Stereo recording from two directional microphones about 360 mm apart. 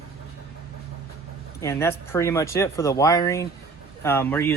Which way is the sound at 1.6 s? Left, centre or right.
Centre.